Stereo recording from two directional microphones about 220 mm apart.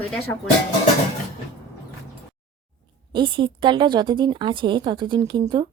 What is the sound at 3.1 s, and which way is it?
A woman's voice, 20° right (ahead or behind).